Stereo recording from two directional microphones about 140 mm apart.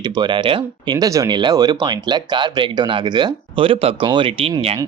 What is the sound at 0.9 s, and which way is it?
Speech, 25° right (ahead or behind).